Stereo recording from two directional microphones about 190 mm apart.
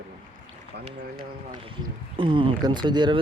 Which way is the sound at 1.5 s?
25° right (ahead or behind).